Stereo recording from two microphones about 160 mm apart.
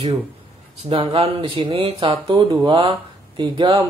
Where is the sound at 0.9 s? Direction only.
35° right (ahead or behind).